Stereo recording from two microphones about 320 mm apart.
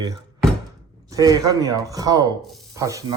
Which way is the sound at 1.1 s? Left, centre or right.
Centre.